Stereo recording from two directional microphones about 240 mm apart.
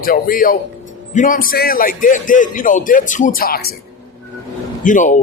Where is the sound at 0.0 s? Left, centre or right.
Left.